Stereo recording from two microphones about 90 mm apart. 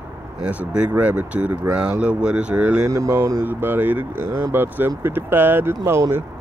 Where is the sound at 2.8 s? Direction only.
35° right (ahead or behind).